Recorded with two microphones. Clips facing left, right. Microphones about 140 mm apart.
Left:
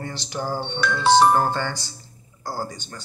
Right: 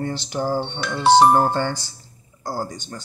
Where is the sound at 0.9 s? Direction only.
25° right (ahead or behind).